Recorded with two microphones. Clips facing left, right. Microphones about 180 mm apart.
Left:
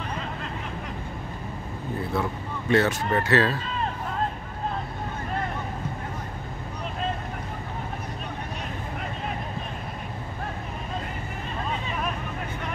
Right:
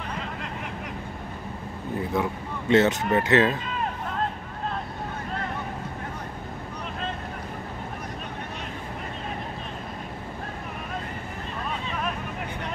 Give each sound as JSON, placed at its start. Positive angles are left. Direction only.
{"t": 2.1, "sound": "speech", "side_deg": -15}